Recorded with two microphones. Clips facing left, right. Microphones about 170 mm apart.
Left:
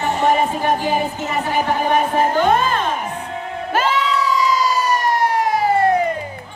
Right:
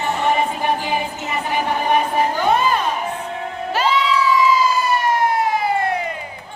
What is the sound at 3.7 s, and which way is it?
Crowd, 50° left (ahead or behind).